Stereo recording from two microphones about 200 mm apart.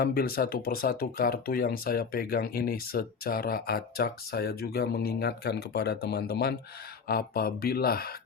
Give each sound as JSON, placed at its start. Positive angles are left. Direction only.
{"t": 0.0, "sound": "speech", "side_deg": 50}